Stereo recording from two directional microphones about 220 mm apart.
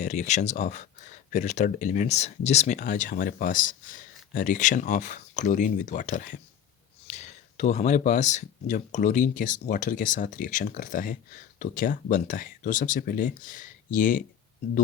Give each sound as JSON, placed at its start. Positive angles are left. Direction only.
{"t": 0.0, "sound": "speech", "side_deg": 35}